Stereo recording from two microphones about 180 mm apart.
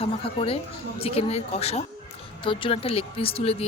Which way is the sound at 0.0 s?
30° left (ahead or behind).